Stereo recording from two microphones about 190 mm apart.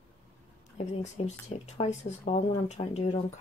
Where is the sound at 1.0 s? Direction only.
35° left (ahead or behind).